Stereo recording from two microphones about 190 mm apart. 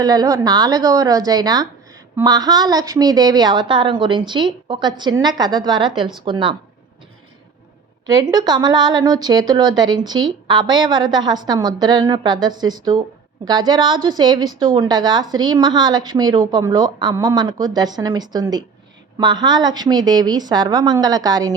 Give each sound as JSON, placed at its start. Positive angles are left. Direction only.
{"t": 0.0, "sound": "a woman's voice", "side_deg": -20}
{"t": 8.0, "sound": "a woman's voice", "side_deg": -20}